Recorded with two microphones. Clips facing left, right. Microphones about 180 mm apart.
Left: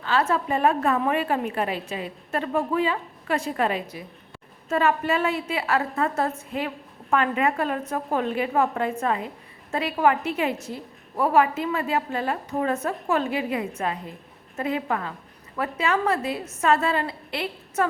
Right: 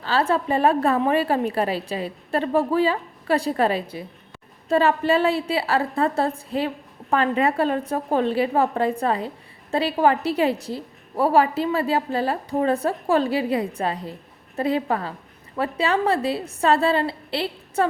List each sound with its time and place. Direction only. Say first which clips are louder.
0.0 s a woman's voice: right 2 dB; 30° right (ahead or behind)